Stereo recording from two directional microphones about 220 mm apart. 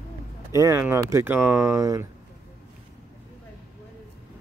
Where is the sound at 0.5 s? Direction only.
15° right (ahead or behind).